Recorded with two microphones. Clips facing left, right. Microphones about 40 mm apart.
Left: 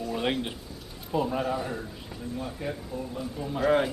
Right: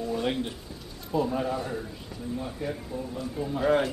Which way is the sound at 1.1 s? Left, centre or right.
Centre.